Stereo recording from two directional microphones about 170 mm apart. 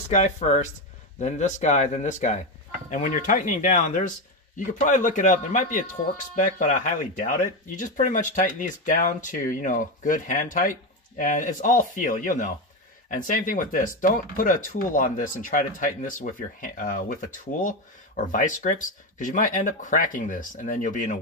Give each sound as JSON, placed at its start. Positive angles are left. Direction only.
{"t": 0.1, "sound": "speech", "side_deg": 45}